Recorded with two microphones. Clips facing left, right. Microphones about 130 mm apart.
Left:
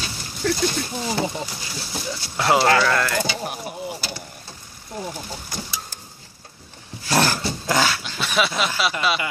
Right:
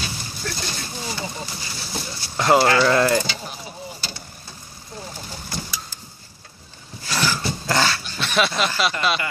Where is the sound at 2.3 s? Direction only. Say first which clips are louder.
Right 2 dB; centre (ahead or behind).